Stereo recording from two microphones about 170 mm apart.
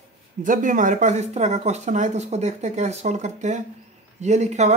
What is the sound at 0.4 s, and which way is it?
A man's voice, 50° right (ahead or behind).